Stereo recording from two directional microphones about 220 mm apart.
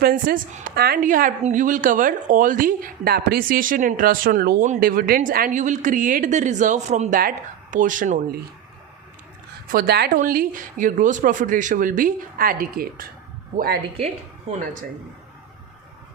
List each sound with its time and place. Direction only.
0.0 s a woman's voice: 40° right (ahead or behind)
9.7 s a woman's voice: 45° right (ahead or behind)
14.5 s a woman's voice: 35° right (ahead or behind)